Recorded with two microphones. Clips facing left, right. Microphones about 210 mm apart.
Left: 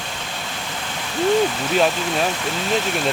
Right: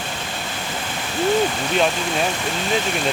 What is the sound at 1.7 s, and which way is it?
Speech, centre (ahead or behind).